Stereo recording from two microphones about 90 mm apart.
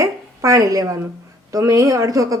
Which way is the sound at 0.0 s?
40° right (ahead or behind).